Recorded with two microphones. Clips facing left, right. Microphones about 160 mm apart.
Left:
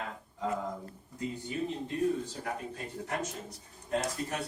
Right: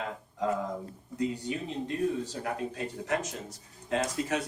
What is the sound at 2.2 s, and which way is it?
Speech, 90° right.